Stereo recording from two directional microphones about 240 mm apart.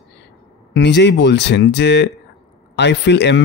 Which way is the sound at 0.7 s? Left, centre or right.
Left.